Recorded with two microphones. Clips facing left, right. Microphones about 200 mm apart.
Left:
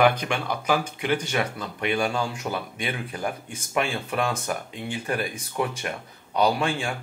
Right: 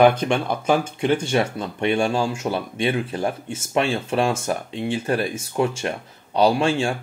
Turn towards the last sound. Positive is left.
turn(degrees=-30)  # may be behind; listen again after turning